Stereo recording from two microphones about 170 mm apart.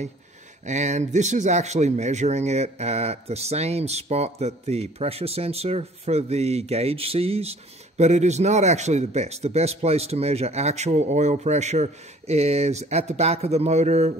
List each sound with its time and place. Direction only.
0.7 s a man's voice: 45° right (ahead or behind)